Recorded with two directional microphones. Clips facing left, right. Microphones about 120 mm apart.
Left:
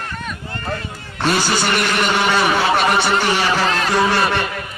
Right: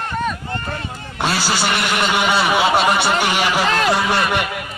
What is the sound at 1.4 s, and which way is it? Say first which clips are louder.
Speech: left 1 dB; 15° right (ahead or behind).